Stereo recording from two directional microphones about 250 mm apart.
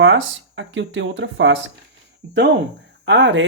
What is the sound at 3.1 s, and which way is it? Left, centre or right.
Speech, right.